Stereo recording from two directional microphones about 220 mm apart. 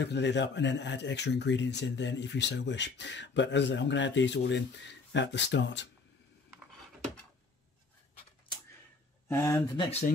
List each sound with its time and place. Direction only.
0.0 s speech: 50° left (ahead or behind)
9.7 s speech: 25° left (ahead or behind)